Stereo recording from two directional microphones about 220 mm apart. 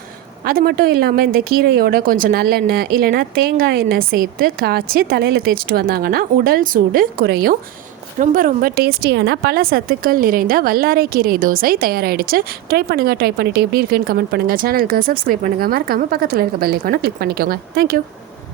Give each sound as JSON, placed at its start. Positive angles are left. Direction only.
{"t": 0.4, "sound": "a woman's voice", "side_deg": -45}